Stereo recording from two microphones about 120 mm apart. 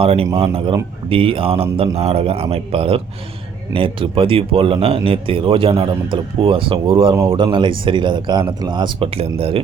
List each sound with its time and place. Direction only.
0.0 s speech: 55° right (ahead or behind)